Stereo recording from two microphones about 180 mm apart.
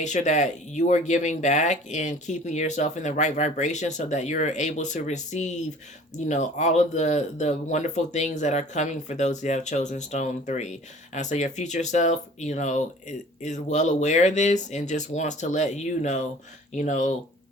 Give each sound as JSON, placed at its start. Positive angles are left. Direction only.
{"t": 0.0, "sound": "speech", "side_deg": 40}